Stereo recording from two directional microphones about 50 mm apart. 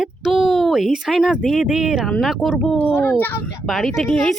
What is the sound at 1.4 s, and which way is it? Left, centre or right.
Speech, centre.